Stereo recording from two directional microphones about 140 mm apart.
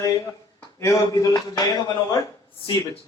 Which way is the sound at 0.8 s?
25° left (ahead or behind).